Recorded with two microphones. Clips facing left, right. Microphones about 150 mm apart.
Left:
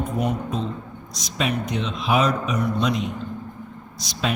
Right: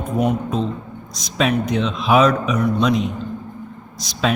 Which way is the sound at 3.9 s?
90° right.